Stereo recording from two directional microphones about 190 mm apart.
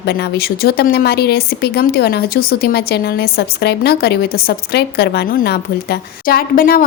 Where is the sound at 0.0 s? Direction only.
55° left (ahead or behind).